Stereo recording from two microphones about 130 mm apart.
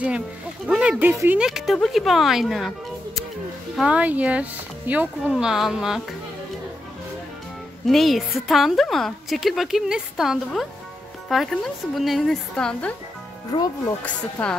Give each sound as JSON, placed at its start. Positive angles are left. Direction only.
{"t": 0.7, "sound": "speech", "side_deg": -5}
{"t": 1.5, "sound": "a woman's voice", "side_deg": 0}
{"t": 3.7, "sound": "speech", "side_deg": -5}
{"t": 5.2, "sound": "a woman's voice", "side_deg": 0}
{"t": 7.9, "sound": "a woman's voice", "side_deg": 0}
{"t": 13.5, "sound": "speech", "side_deg": 35}
{"t": 14.4, "sound": "a woman's voice", "side_deg": 15}